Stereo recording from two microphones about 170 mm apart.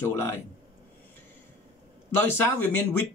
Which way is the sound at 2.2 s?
10° left (ahead or behind).